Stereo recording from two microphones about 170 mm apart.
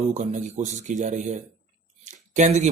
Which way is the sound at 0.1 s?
45° right (ahead or behind).